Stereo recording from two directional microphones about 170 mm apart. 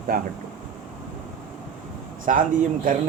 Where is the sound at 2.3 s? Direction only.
45° right (ahead or behind).